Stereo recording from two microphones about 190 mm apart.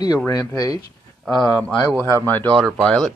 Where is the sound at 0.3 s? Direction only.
20° left (ahead or behind).